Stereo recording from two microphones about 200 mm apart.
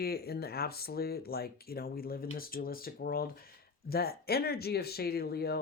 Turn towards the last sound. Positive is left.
turn(degrees=50)  # may be behind; listen again after turning